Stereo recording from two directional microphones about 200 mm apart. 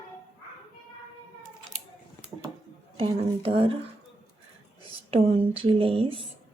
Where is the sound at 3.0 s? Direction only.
30° right (ahead or behind).